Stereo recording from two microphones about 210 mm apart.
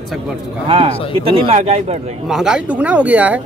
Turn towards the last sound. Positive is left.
turn(degrees=-5)  # may be behind; listen again after turning